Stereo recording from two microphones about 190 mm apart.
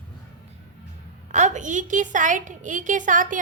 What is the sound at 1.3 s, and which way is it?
A woman's voice, 40° right (ahead or behind).